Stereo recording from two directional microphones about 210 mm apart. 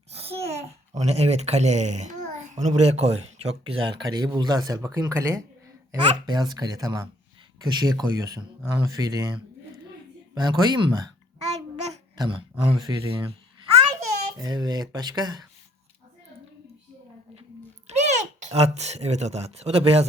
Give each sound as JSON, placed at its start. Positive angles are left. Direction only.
{"t": 0.1, "sound": "a child's voice", "side_deg": -30}
{"t": 10.3, "sound": "speech", "side_deg": -20}
{"t": 12.1, "sound": "speech", "side_deg": -20}
{"t": 14.3, "sound": "speech", "side_deg": -20}
{"t": 17.8, "sound": "a child's voice", "side_deg": -30}